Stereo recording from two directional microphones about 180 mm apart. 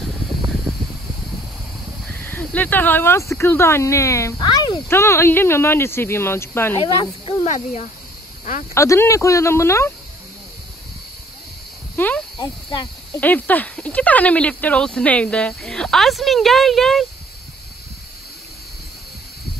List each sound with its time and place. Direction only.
2.0 s speech: 10° left (ahead or behind)
6.8 s speech: 30° left (ahead or behind)
8.7 s speech: 15° left (ahead or behind)
12.0 s cricket: 15° left (ahead or behind)
13.1 s speech: 10° left (ahead or behind)